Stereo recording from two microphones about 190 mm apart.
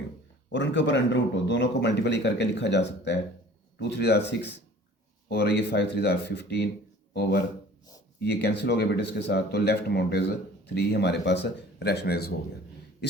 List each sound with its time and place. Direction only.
0.5 s speech: 70° left (ahead or behind); by 12.3 s 55° left (ahead or behind)